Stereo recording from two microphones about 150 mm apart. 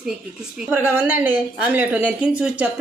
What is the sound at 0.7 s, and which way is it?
A woman's voice, 15° right (ahead or behind).